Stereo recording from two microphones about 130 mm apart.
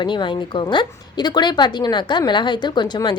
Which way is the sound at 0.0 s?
35° left (ahead or behind).